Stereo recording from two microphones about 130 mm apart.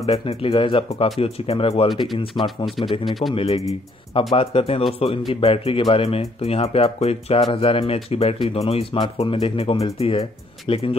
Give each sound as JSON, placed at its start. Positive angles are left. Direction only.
{"t": 0.0, "sound": "speech", "side_deg": 50}
{"t": 3.1, "sound": "speech", "side_deg": 0}
{"t": 3.3, "sound": "speech", "side_deg": 50}